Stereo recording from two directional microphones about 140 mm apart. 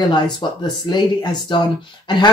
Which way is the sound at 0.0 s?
30° left (ahead or behind).